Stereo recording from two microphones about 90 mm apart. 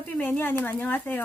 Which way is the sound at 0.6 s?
20° left (ahead or behind).